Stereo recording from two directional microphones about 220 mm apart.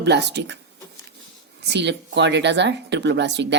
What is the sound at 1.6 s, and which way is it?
Speech, 50° right (ahead or behind).